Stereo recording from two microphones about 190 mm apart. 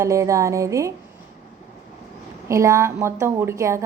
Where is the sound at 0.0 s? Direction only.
15° right (ahead or behind).